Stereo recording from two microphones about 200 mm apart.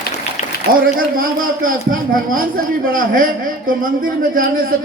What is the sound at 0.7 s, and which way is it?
A man's voice, 45° right (ahead or behind).